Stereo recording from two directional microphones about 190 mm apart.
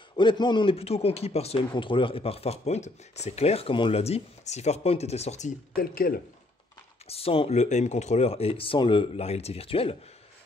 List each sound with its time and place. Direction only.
0.1 s a man's voice: 25° left (ahead or behind)
5.8 s speech: 50° left (ahead or behind)
7.1 s a man's voice: 30° left (ahead or behind)